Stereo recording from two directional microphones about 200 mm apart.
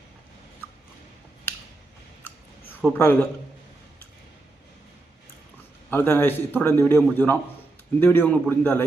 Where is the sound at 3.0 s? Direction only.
10° left (ahead or behind).